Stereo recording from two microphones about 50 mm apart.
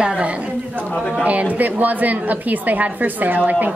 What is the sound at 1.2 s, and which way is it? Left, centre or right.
A woman's voice, right.